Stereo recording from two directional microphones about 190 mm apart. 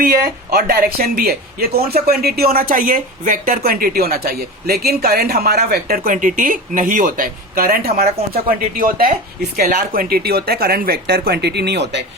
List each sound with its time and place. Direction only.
0.0 s speech: 50° right (ahead or behind)